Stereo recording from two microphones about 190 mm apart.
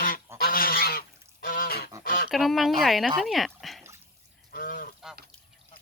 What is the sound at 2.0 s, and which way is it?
Pant, 50° left (ahead or behind).